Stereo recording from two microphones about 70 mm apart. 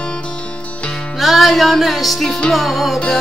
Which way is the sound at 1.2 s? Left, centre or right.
Centre.